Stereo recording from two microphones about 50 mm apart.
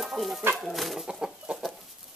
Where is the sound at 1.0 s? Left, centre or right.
Centre.